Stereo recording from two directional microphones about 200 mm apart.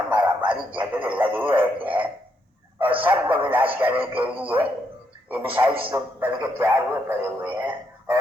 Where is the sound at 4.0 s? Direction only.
25° right (ahead or behind).